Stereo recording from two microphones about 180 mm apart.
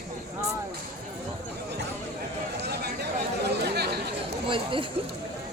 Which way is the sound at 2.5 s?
65° right (ahead or behind).